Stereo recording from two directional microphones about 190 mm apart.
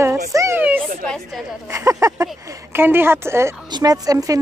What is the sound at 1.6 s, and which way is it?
A woman's voice, 15° right (ahead or behind).